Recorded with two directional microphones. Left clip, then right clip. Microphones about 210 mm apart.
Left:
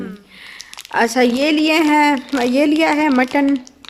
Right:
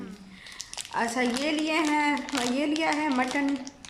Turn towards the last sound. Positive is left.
turn(degrees=50)  # may be behind; listen again after turning